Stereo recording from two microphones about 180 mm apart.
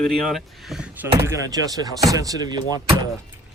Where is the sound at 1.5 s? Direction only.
20° right (ahead or behind).